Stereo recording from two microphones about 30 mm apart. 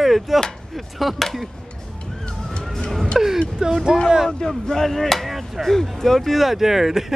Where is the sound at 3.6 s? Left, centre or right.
Right.